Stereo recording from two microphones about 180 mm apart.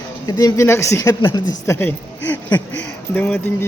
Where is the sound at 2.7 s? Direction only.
90° left.